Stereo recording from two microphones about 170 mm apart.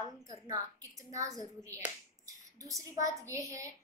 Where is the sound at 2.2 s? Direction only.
20° right (ahead or behind).